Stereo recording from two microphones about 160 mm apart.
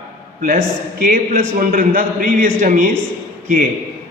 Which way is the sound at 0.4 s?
60° right (ahead or behind).